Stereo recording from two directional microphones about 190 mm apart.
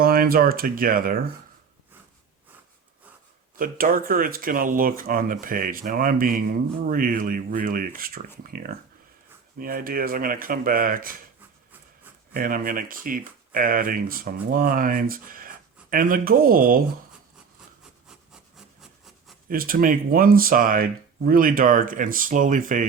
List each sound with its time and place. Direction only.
0.0 s speech: 50° right (ahead or behind)
3.6 s speech: 50° right (ahead or behind)
12.3 s speech: 45° right (ahead or behind)
18.5 s wood: centre (ahead or behind)
19.5 s speech: 50° right (ahead or behind)